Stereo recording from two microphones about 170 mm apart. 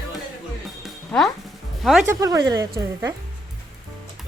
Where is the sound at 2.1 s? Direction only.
20° right (ahead or behind).